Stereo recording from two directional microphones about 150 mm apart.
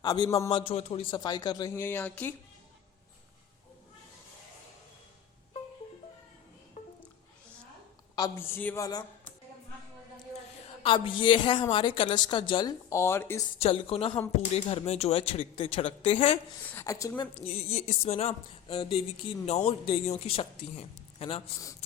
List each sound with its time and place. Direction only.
0.0 s speech: 25° left (ahead or behind)
0.5 s speech: 40° left (ahead or behind)
1.2 s speech: 30° left (ahead or behind)
1.7 s speech: 15° left (ahead or behind)
8.1 s speech: 20° left (ahead or behind)
10.8 s speech: 35° left (ahead or behind); by 13.4 s 15° left (ahead or behind)
13.6 s speech: 40° left (ahead or behind)
16.7 s speech: 20° left (ahead or behind)
17.3 s speech: 45° left (ahead or behind)